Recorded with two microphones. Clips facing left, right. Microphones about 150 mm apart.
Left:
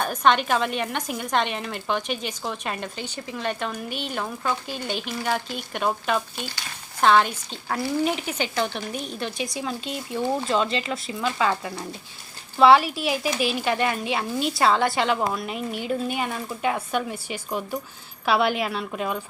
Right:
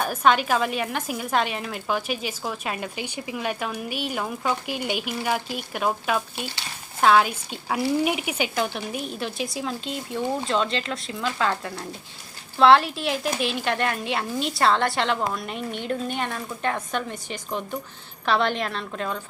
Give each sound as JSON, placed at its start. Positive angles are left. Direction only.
{"t": 0.0, "sound": "a woman's voice", "side_deg": -5}